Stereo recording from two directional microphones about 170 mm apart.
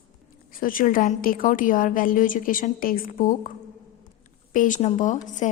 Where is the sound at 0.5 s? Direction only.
55° left (ahead or behind).